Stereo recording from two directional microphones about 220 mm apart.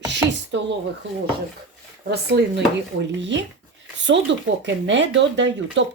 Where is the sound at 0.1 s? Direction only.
55° right (ahead or behind).